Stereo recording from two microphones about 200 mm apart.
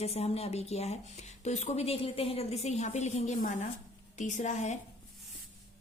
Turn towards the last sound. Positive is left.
turn(degrees=35)  # may be behind; listen again after turning